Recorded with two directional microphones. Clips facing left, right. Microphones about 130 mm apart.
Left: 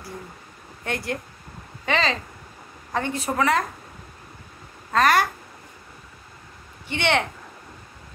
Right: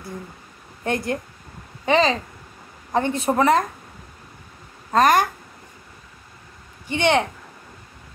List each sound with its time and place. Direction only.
0.8 s a woman's voice: 20° right (ahead or behind)
4.9 s speech: 20° right (ahead or behind)
6.9 s speech: 15° right (ahead or behind)